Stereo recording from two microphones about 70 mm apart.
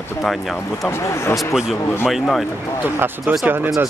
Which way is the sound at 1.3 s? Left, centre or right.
Centre.